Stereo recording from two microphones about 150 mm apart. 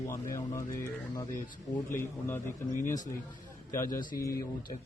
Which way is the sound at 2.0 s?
15° left (ahead or behind).